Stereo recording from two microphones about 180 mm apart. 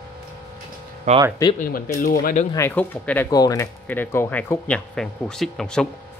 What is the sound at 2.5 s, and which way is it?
Speech, 10° left (ahead or behind).